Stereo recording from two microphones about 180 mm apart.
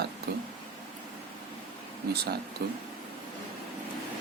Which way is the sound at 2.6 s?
65° right (ahead or behind).